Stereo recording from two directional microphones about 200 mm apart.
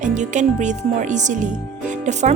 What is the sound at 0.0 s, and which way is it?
A woman's voice, 35° right (ahead or behind).